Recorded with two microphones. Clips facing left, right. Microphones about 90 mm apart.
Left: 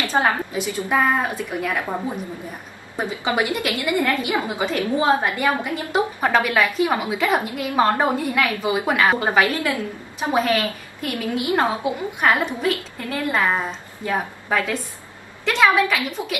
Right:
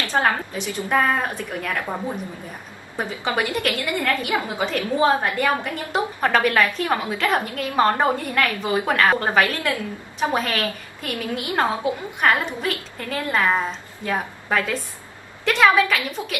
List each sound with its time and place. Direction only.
0.0 s a woman's voice: 10° left (ahead or behind)
3.0 s a woman's voice: 15° left (ahead or behind)
15.4 s a woman's voice: centre (ahead or behind)